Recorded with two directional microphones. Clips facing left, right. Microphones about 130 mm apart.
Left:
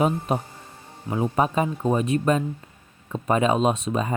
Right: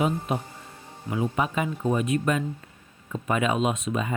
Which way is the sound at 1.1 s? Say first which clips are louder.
Left 4 dB; 35° left (ahead or behind).